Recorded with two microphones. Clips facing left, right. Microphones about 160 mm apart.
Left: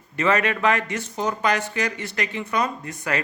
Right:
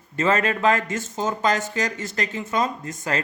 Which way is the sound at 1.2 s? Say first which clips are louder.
Even; 25° right (ahead or behind).